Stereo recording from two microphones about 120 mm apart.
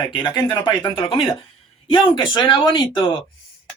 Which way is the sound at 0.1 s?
35° left (ahead or behind).